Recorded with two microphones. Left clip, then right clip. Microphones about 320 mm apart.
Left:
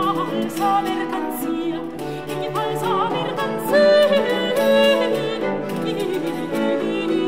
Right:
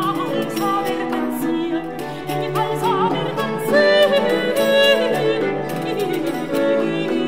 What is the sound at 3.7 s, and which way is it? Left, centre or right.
Music, left.